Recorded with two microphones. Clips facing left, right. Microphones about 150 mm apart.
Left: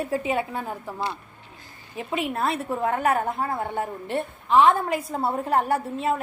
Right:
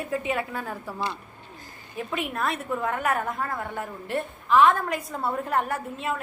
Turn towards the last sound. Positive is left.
turn(degrees=35)  # may be behind; listen again after turning